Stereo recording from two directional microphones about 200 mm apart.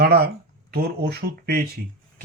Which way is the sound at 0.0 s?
50° right (ahead or behind).